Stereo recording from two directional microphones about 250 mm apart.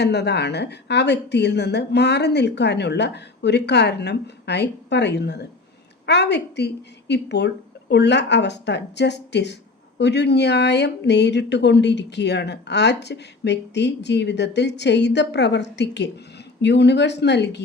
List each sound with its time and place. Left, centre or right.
0.0 s speech: left